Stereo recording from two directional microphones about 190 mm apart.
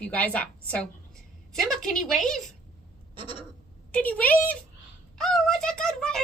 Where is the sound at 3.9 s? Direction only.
5° left (ahead or behind).